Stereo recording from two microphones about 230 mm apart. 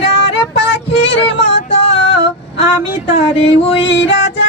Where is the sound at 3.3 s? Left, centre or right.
Left.